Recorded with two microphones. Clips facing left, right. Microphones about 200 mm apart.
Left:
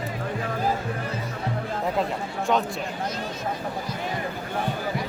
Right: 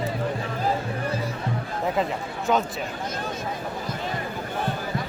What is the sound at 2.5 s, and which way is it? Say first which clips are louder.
Speech: right 1 dB; centre (ahead or behind).